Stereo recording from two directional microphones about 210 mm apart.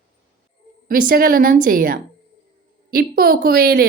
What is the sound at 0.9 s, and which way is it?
A woman's voice, 45° right (ahead or behind).